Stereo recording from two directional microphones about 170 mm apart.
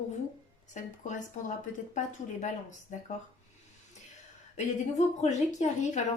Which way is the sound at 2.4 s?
45° left (ahead or behind).